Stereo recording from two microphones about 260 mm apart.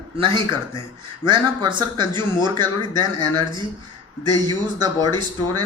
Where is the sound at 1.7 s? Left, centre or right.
Centre.